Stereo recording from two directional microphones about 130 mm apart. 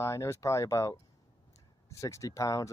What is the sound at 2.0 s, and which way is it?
Speech, 25° left (ahead or behind).